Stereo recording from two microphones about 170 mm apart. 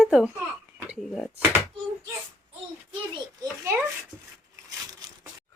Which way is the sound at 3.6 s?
15° right (ahead or behind).